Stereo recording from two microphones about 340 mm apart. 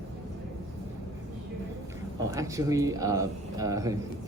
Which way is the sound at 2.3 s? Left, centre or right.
Centre.